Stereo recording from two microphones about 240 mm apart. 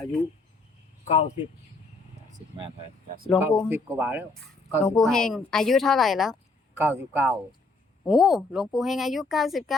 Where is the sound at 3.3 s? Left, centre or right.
Centre.